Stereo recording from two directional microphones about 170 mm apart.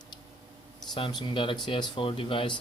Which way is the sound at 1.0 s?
30° left (ahead or behind).